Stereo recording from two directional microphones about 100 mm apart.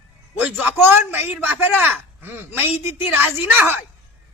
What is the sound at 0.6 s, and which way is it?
A man's voice, 20° right (ahead or behind).